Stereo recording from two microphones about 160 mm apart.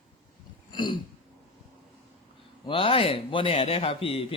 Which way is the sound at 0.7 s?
30° left (ahead or behind).